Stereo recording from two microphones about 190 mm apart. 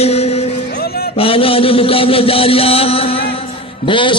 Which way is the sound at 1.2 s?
30° left (ahead or behind).